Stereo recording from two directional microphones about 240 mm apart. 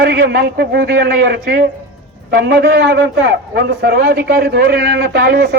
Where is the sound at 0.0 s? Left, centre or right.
Right.